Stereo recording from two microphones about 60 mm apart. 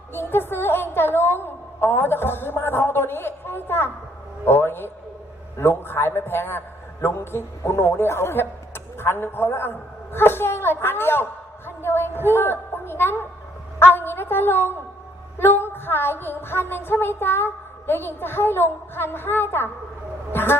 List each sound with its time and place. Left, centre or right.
0.1 s a woman's voice: left